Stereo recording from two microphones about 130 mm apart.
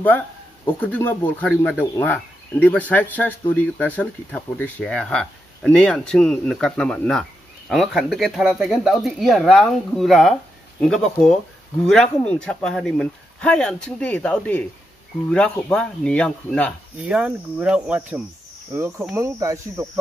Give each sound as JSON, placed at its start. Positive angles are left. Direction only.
{"t": 0.7, "sound": "speech", "side_deg": 15}
{"t": 17.0, "sound": "speech", "side_deg": -10}
{"t": 18.7, "sound": "speech", "side_deg": -20}